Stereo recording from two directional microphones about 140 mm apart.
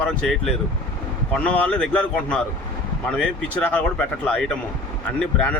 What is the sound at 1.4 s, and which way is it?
Speech, 10° left (ahead or behind).